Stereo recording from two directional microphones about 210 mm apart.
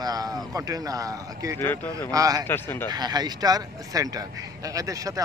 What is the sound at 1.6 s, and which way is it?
Speech, 10° left (ahead or behind).